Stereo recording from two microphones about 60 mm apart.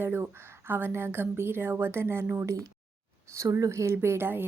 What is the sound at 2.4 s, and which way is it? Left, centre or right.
A woman's voice, right.